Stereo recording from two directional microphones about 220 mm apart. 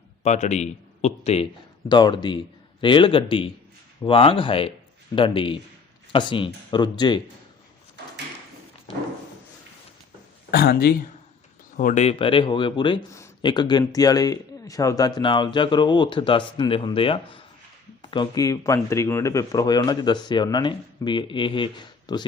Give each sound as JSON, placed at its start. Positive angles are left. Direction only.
{"t": 0.2, "sound": "speech", "side_deg": 30}
{"t": 10.5, "sound": "speech", "side_deg": 45}
{"t": 11.8, "sound": "speech", "side_deg": 35}